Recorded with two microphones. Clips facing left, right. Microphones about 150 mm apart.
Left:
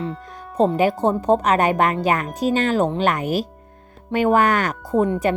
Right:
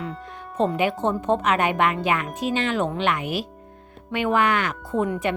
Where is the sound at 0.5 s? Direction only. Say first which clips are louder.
Left 5 dB; 35° left (ahead or behind).